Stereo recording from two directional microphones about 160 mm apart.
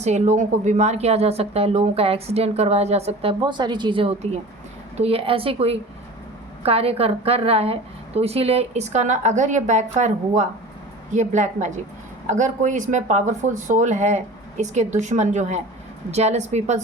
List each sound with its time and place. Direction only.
0.0 s speech: 45° right (ahead or behind)